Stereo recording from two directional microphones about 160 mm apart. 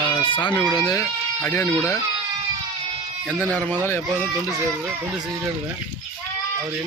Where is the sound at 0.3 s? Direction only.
30° left (ahead or behind).